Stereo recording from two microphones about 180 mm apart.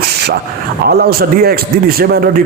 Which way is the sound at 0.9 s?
60° right (ahead or behind).